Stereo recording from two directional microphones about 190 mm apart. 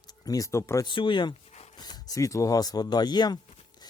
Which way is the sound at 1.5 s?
35° left (ahead or behind).